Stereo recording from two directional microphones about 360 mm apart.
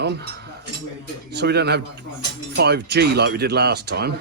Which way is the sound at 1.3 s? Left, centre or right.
Right.